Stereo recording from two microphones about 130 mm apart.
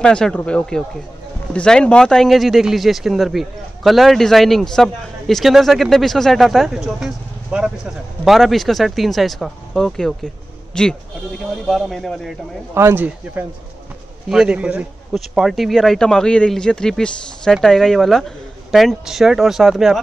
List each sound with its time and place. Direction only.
0.0 s speech: 5° left (ahead or behind)
12.7 s speech: 15° right (ahead or behind); by 20.0 s centre (ahead or behind)